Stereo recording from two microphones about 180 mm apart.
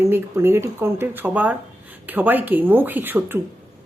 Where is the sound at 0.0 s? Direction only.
15° right (ahead or behind).